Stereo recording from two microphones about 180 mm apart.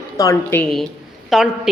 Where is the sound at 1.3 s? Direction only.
Centre (ahead or behind).